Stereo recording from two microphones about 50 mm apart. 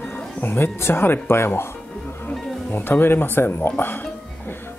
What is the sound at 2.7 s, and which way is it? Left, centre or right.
Speech, left.